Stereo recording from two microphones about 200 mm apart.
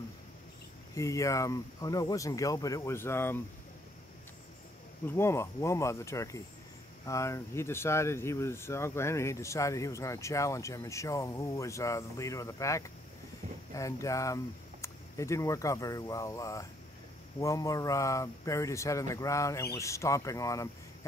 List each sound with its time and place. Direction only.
0.9 s speech: 15° left (ahead or behind)
5.0 s speech: 15° left (ahead or behind)